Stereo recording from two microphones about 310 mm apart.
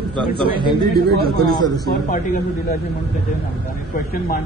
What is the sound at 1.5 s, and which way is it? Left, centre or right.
Speech, centre.